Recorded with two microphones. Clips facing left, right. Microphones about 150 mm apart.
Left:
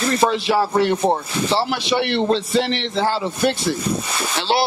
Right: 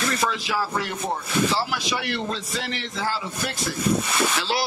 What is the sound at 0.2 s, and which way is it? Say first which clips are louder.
Speech: left 8 dB; 30° left (ahead or behind).